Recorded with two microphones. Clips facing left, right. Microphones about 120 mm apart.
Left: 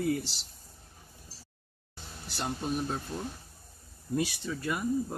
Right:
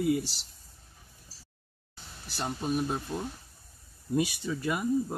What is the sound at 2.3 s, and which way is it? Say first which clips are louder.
Speech: right 1 dB; 5° right (ahead or behind).